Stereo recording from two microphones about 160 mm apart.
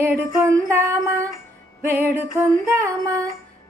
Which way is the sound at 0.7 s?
15° right (ahead or behind).